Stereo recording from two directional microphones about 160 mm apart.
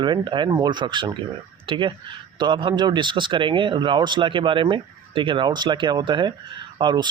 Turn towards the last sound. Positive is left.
turn(degrees=-30)  # may be behind; listen again after turning